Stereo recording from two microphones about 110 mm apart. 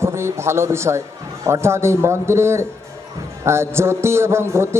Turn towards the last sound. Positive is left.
turn(degrees=-25)  # may be behind; listen again after turning